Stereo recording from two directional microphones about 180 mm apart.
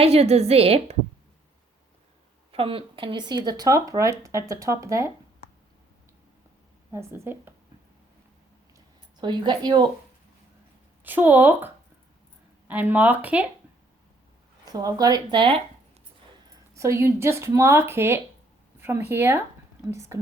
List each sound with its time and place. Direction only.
0.0 s a woman's voice: 35° right (ahead or behind)
2.5 s speech: 30° right (ahead or behind)
6.9 s speech: 15° right (ahead or behind)
9.2 s speech: 25° right (ahead or behind)
11.0 s speech: 10° right (ahead or behind)
14.6 s speech: 20° right (ahead or behind)
16.7 s speech: 15° right (ahead or behind)